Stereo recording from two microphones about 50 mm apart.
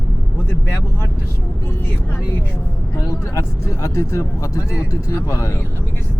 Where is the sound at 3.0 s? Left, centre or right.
Left.